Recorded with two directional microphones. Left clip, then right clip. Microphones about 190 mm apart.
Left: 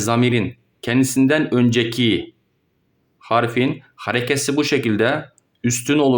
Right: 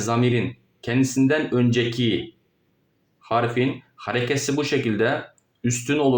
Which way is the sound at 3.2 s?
40° left (ahead or behind).